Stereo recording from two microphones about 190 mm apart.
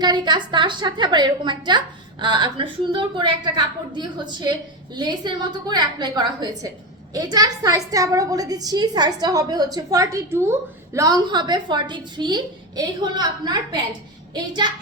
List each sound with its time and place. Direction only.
0.0 s a woman's voice: 25° right (ahead or behind)